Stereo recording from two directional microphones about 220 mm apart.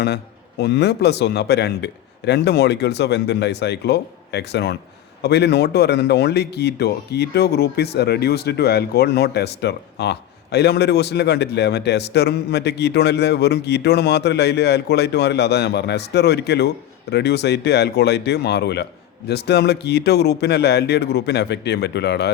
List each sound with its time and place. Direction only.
0.6 s speech: 50° left (ahead or behind)